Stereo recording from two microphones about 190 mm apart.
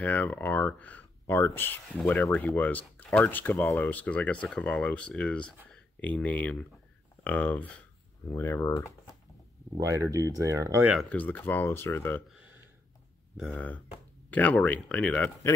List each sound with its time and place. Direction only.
0.0 s speech: 10° left (ahead or behind)
9.8 s speech: 15° right (ahead or behind)
10.9 s speech: 5° left (ahead or behind)
13.4 s speech: 5° left (ahead or behind)